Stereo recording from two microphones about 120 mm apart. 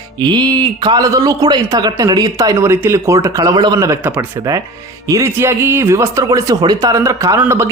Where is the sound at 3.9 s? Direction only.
15° right (ahead or behind).